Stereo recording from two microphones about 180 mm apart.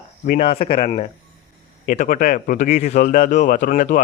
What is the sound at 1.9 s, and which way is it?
Speech, 45° left (ahead or behind).